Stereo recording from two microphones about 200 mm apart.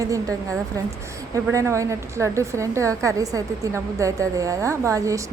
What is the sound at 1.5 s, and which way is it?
A woman's voice, 15° right (ahead or behind).